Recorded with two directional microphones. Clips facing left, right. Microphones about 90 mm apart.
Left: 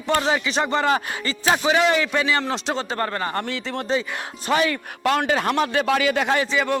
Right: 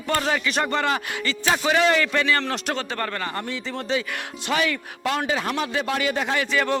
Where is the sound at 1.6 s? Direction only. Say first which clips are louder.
Right 1 dB; 10° left (ahead or behind).